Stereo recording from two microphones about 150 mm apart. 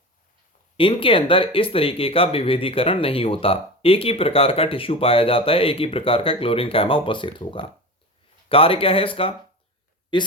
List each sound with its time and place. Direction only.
0.8 s speech: 35° left (ahead or behind)